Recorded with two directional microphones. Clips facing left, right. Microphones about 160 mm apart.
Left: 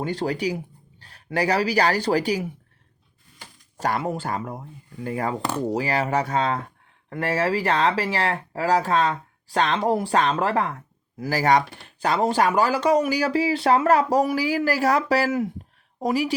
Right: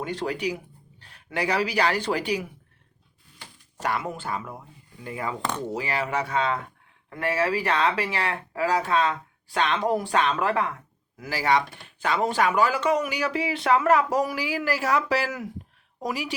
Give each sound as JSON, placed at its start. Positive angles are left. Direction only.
{"t": 0.0, "sound": "speech", "side_deg": 35}
{"t": 3.8, "sound": "a woman's voice", "side_deg": 35}